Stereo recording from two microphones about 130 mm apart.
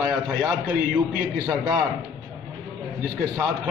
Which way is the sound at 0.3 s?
10° right (ahead or behind).